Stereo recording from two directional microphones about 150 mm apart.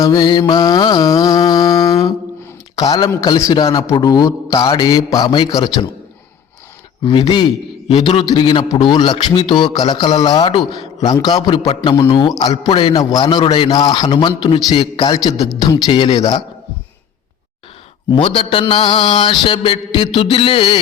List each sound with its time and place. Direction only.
0.0 s mantra: 30° left (ahead or behind)
2.7 s a man's voice: 25° left (ahead or behind)
7.0 s mantra: 30° left (ahead or behind)
7.9 s a man's voice: 40° left (ahead or behind)
12.0 s mantra: 30° left (ahead or behind)
12.4 s a man's voice: 25° left (ahead or behind)
18.1 s mantra: 35° left (ahead or behind)